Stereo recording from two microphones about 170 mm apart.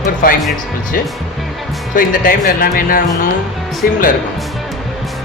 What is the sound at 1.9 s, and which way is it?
Speech, 55° left (ahead or behind).